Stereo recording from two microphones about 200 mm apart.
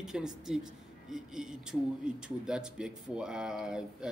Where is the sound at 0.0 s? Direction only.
5° right (ahead or behind).